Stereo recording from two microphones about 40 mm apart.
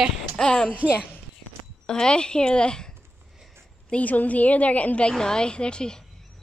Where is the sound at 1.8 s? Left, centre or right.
Centre.